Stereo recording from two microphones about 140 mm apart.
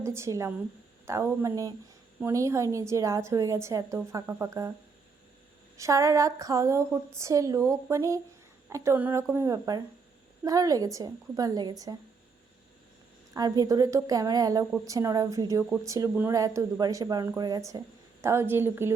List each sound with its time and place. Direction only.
0.0 s a woman's voice: 20° right (ahead or behind)
5.7 s a woman's voice: 20° right (ahead or behind)
13.3 s a woman's voice: 25° right (ahead or behind)